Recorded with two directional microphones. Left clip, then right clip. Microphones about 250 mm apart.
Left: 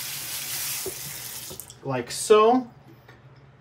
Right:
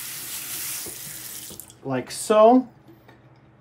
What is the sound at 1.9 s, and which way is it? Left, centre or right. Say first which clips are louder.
Speech: even; centre.